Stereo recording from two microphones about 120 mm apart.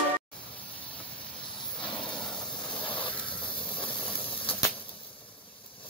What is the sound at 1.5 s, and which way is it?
Hiss, 45° left (ahead or behind).